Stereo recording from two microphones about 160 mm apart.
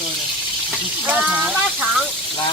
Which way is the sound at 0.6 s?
10° right (ahead or behind).